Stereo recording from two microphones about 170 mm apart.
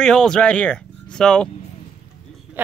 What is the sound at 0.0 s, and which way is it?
Speech, 5° left (ahead or behind).